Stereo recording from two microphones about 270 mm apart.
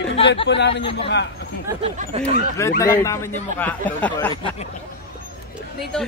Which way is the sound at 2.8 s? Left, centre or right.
Centre.